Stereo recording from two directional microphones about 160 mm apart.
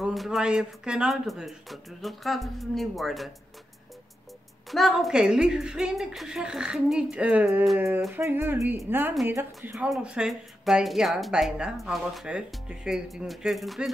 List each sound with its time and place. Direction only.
0.0 s speech: centre (ahead or behind)
4.6 s speech: centre (ahead or behind)
8.1 s speech: 15° right (ahead or behind)